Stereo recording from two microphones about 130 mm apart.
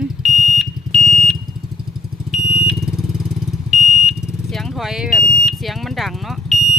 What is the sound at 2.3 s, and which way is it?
Vehicle, 5° right (ahead or behind).